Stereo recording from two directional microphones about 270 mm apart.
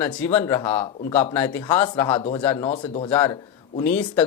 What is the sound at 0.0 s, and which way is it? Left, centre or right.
A man's voice, centre.